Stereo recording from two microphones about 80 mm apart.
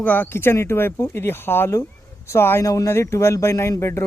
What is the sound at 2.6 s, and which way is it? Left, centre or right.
Speech, left.